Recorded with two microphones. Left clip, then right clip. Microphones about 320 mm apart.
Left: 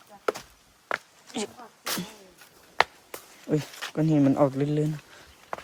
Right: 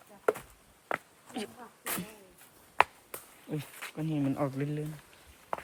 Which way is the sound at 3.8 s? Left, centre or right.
Centre.